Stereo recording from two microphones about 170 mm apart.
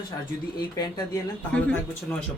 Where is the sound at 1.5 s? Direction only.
5° left (ahead or behind).